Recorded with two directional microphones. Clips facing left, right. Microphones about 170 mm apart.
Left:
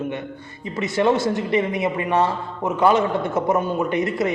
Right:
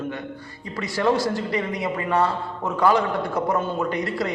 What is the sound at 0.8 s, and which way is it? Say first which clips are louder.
A man's voice: left 3 dB; 25° left (ahead or behind).